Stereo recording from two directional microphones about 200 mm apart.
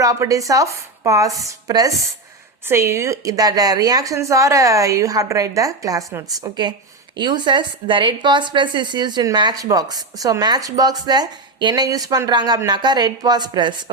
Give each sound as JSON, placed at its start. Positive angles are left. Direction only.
{"t": 0.0, "sound": "a woman's voice", "side_deg": -15}